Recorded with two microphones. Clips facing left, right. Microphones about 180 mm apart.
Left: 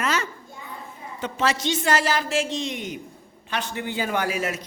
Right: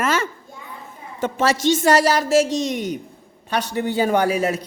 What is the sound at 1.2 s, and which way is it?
Speech, 50° right (ahead or behind).